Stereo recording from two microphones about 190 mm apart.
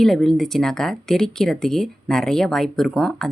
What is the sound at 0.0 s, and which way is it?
Speech, centre (ahead or behind).